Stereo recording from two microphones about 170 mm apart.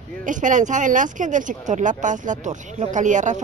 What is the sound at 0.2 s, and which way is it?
A woman's voice, 50° right (ahead or behind).